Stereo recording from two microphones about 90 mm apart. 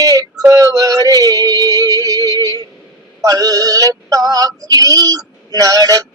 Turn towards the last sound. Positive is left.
turn(degrees=-45)  # may be behind; listen again after turning